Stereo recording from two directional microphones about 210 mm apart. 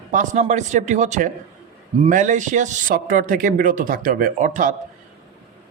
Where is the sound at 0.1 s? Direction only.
35° right (ahead or behind).